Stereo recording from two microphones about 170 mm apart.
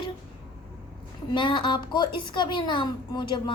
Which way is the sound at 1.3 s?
25° left (ahead or behind).